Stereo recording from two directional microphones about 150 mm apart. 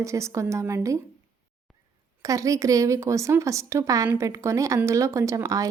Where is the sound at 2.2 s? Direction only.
20° right (ahead or behind).